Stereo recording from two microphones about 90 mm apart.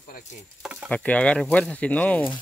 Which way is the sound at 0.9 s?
10° left (ahead or behind).